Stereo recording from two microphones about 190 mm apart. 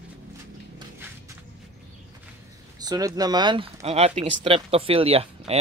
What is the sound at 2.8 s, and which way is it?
Speech, 20° right (ahead or behind).